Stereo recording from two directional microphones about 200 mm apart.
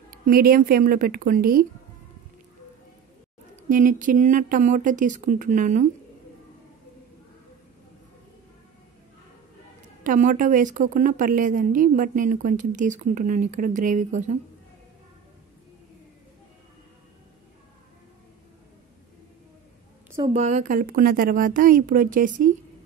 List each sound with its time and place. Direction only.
0.3 s speech: 45° right (ahead or behind)
3.6 s a woman's voice: 40° right (ahead or behind)
10.0 s a woman's voice: 40° right (ahead or behind)
20.3 s speech: 35° right (ahead or behind)